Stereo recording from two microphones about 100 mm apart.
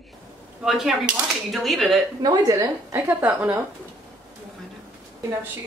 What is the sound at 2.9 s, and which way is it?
Speech, 20° right (ahead or behind).